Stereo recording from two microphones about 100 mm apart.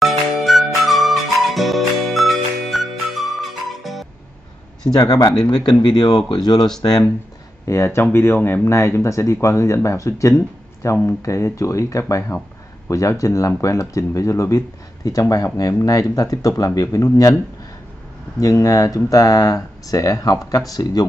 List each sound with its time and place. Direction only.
0.0 s music: centre (ahead or behind)
4.9 s speech: 40° left (ahead or behind)
7.6 s speech: 30° left (ahead or behind)
18.4 s speech: 35° left (ahead or behind)